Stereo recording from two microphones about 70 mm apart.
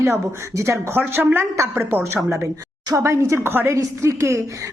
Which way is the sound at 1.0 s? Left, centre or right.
Right.